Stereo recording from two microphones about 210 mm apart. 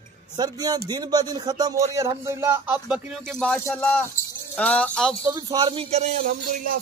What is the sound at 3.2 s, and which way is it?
Speech, 5° left (ahead or behind).